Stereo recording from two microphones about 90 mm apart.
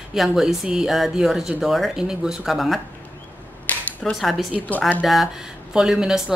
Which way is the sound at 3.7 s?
20° left (ahead or behind).